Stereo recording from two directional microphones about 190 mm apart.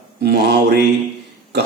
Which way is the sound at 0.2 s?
55° right (ahead or behind).